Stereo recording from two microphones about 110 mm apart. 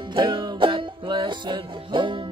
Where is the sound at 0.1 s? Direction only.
45° right (ahead or behind).